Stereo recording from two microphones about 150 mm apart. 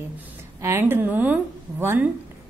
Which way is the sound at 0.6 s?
15° right (ahead or behind).